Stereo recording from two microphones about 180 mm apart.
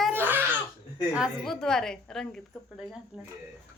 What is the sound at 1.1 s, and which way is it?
A woman's voice, centre (ahead or behind).